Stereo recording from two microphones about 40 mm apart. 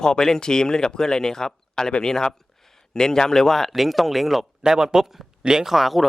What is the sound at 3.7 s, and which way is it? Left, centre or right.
Speech, centre.